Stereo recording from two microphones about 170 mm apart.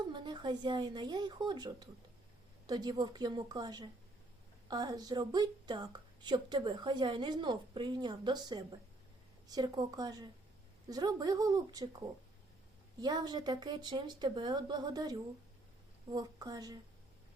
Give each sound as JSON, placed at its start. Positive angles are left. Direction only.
{"t": 0.0, "sound": "a woman's voice", "side_deg": -25}